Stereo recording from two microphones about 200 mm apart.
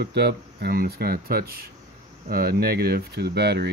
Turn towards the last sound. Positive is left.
turn(degrees=-55)  # may be behind; listen again after turning